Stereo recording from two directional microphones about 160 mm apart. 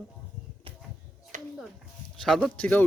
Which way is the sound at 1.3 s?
50° right (ahead or behind).